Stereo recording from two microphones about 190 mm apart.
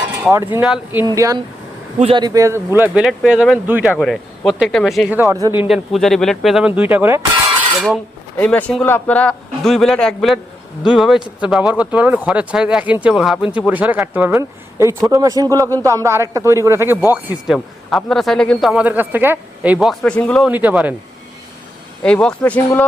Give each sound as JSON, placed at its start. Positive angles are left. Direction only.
{"t": 0.2, "sound": "speech", "side_deg": -15}
{"t": 2.0, "sound": "a man's voice", "side_deg": -30}
{"t": 5.2, "sound": "speech", "side_deg": -15}
{"t": 5.6, "sound": "speech", "side_deg": 0}
{"t": 8.4, "sound": "speech", "side_deg": 10}
{"t": 17.1, "sound": "speech", "side_deg": 0}
{"t": 18.7, "sound": "speech", "side_deg": -10}
{"t": 20.5, "sound": "speech", "side_deg": -10}
{"t": 22.0, "sound": "speech", "side_deg": 5}